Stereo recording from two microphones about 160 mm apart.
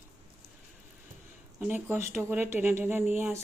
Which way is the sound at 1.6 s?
10° right (ahead or behind).